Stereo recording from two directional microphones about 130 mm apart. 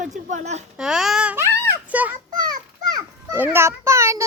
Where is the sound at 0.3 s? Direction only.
65° right (ahead or behind).